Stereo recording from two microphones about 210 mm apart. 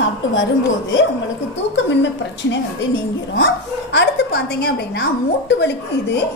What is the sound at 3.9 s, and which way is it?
A woman's voice, 50° left (ahead or behind).